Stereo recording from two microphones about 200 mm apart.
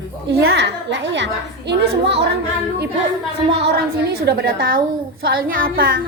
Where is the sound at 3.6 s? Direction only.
55° right (ahead or behind).